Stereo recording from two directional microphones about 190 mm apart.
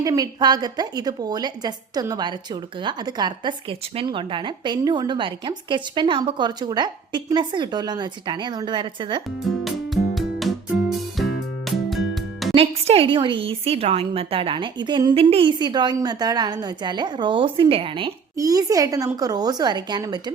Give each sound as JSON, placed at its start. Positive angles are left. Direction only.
{"t": 0.0, "sound": "a woman's voice", "side_deg": -20}
{"t": 9.5, "sound": "music", "side_deg": 0}
{"t": 12.5, "sound": "a woman's voice", "side_deg": -30}